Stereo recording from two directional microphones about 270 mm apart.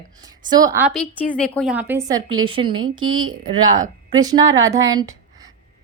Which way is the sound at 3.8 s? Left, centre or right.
Centre.